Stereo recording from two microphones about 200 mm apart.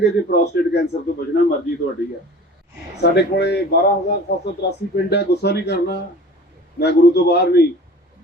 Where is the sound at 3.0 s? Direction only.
55° left (ahead or behind).